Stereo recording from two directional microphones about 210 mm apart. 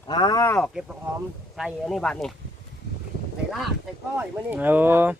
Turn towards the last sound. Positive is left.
turn(degrees=-10)  # may be behind; listen again after turning